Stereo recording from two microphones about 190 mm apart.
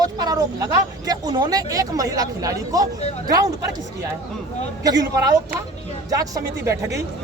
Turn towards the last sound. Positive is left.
turn(degrees=-15)  # may be behind; listen again after turning